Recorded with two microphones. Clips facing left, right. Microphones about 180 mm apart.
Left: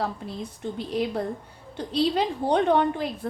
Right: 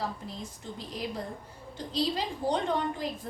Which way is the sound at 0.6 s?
65° left (ahead or behind).